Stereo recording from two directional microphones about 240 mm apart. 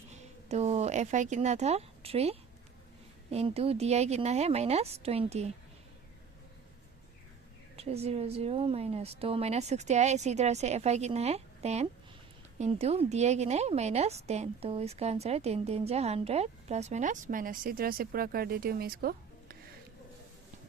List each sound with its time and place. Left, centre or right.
0.1 s a woman's voice: right
7.8 s a woman's voice: right